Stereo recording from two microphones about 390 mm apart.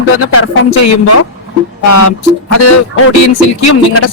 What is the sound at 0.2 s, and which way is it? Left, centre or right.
Speech, left.